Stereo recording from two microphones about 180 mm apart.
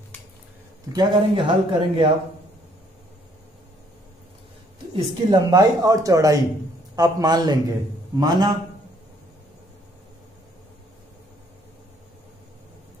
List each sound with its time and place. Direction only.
0.9 s speech: 25° right (ahead or behind)
4.9 s speech: 20° right (ahead or behind)